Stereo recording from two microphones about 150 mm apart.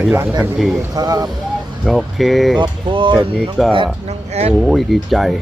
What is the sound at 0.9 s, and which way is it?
Speech, 25° right (ahead or behind).